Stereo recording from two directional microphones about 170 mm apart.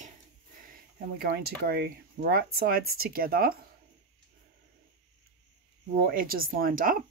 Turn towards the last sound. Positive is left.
turn(degrees=-55)  # may be behind; listen again after turning